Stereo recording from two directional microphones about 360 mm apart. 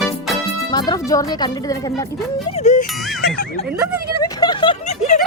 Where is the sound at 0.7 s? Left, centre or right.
Centre.